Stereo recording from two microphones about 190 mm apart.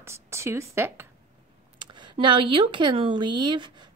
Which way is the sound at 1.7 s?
25° right (ahead or behind).